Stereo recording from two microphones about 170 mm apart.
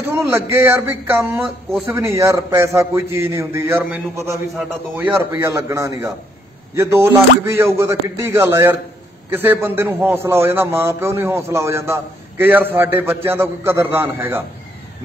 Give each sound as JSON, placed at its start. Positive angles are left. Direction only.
{"t": 0.3, "sound": "a man's voice", "side_deg": -15}
{"t": 5.3, "sound": "a man's voice", "side_deg": -20}